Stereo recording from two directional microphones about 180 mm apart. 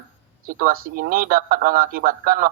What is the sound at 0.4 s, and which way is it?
Speech, 50° right (ahead or behind).